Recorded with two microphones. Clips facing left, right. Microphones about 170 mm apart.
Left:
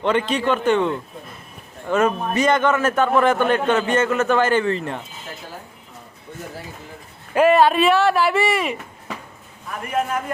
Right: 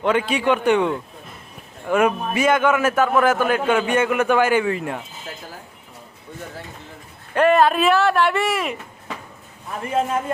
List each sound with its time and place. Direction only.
0.0 s a man's voice: 5° right (ahead or behind)
7.3 s speech: 5° left (ahead or behind)
9.8 s a man's voice: 25° right (ahead or behind)